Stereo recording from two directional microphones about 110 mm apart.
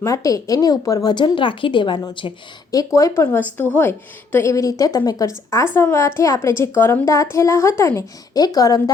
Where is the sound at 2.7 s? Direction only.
30° left (ahead or behind).